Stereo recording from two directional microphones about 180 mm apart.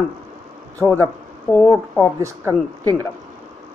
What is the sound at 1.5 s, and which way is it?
Speech, 15° left (ahead or behind).